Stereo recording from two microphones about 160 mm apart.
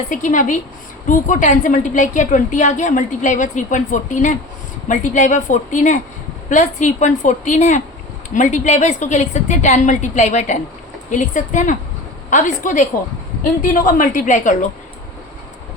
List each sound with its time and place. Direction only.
0.1 s a woman's voice: 50° left (ahead or behind)